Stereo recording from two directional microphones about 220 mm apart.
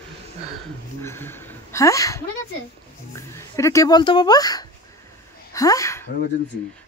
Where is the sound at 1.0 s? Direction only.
10° left (ahead or behind).